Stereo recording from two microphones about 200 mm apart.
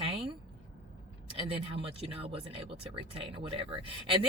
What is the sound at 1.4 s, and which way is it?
Speech, 25° right (ahead or behind).